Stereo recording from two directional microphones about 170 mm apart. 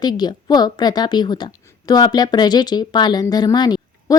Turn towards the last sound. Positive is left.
turn(degrees=25)  # may be behind; listen again after turning